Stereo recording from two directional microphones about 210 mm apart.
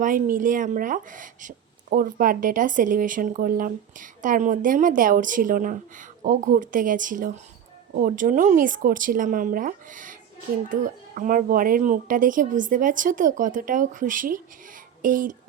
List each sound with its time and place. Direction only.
0.0 s speech: 40° right (ahead or behind)